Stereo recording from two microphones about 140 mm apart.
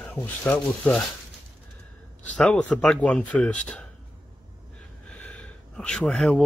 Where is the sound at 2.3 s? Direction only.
5° left (ahead or behind).